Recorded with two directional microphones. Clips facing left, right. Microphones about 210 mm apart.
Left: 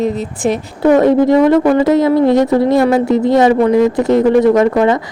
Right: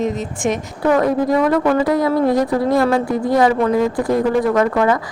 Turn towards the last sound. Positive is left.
turn(degrees=25)  # may be behind; listen again after turning